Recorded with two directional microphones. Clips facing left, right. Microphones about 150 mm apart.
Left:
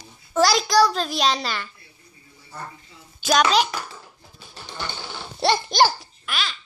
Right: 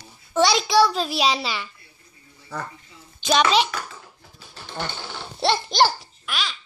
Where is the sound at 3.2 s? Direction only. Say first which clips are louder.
Even; 5° left (ahead or behind).